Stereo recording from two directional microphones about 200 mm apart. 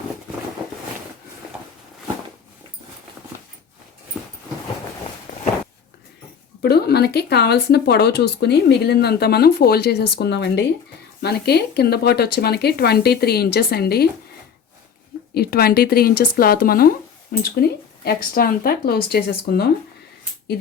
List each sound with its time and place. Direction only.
6.6 s speech: 55° left (ahead or behind)
15.4 s speech: 50° left (ahead or behind)